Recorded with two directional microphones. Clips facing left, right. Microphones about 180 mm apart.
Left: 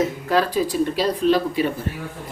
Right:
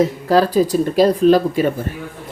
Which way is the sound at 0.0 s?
35° right (ahead or behind).